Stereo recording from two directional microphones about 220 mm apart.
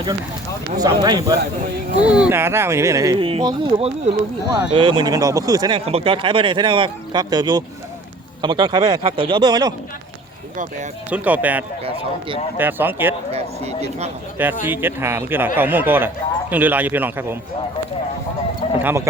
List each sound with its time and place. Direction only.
0.8 s speech: 15° right (ahead or behind)
2.0 s speech: 5° right (ahead or behind)
11.1 s speech: 5° right (ahead or behind)
13.3 s speech: 30° right (ahead or behind)
14.6 s speech: 10° right (ahead or behind)
18.8 s speech: 10° right (ahead or behind)